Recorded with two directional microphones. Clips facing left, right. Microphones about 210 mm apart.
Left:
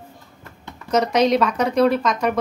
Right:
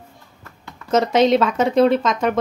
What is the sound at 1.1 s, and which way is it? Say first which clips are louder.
Speech: right 3 dB; 25° right (ahead or behind).